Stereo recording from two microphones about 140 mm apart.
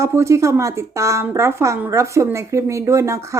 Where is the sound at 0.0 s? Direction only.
20° right (ahead or behind).